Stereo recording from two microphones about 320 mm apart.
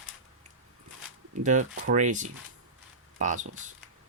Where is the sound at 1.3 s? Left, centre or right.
Right.